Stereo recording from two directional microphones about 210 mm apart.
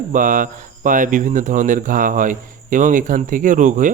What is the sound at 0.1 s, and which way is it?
Speech, 40° right (ahead or behind).